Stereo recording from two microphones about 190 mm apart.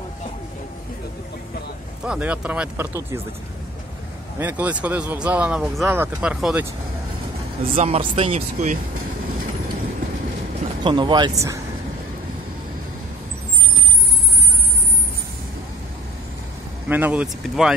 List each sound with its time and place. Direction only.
2.0 s speech: 5° right (ahead or behind)
4.4 s speech: 10° right (ahead or behind)
7.7 s speech: 35° right (ahead or behind)
10.8 s speech: 25° right (ahead or behind)
16.9 s speech: 10° right (ahead or behind)